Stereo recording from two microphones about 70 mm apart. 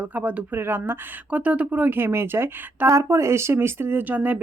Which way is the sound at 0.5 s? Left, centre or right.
Right.